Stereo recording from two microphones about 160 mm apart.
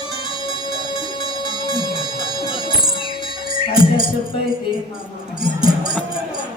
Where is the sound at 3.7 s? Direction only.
35° left (ahead or behind).